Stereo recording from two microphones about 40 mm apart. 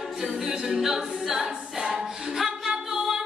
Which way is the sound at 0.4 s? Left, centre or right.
Centre.